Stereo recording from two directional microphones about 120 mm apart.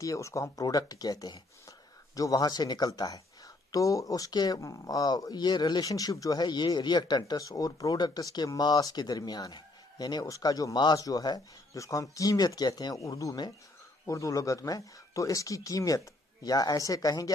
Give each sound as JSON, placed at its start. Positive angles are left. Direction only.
{"t": 0.0, "sound": "speech", "side_deg": 25}